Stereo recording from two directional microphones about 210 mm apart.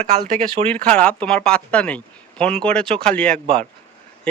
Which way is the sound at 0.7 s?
5° left (ahead or behind).